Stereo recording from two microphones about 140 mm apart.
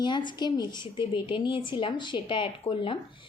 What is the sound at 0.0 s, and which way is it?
A woman's voice, 35° left (ahead or behind).